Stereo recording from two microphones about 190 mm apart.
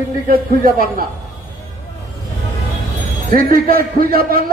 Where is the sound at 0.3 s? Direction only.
50° right (ahead or behind).